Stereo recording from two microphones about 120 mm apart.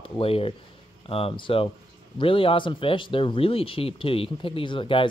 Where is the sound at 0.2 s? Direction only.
50° left (ahead or behind).